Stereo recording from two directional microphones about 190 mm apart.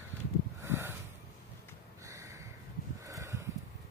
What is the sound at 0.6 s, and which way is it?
Snort, 10° right (ahead or behind).